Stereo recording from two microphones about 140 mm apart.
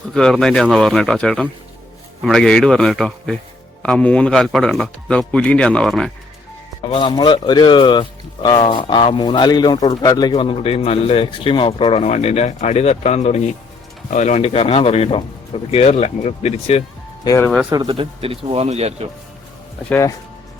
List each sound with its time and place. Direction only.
0.1 s speech: 5° left (ahead or behind)
6.9 s speech: 30° left (ahead or behind); by 16.8 s 50° left (ahead or behind)
17.2 s speech: 20° left (ahead or behind)
17.7 s speech: 35° right (ahead or behind); by 19.0 s 50° right (ahead or behind)
19.9 s speech: 20° left (ahead or behind)